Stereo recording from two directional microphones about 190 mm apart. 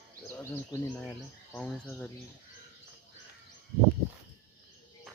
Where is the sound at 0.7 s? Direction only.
20° left (ahead or behind).